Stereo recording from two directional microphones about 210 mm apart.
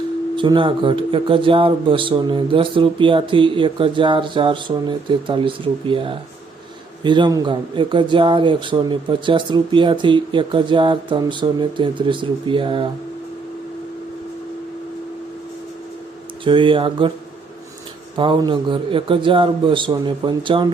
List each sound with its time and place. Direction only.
0.3 s speech: 25° right (ahead or behind)
16.4 s speech: 25° right (ahead or behind)
18.2 s speech: 20° right (ahead or behind)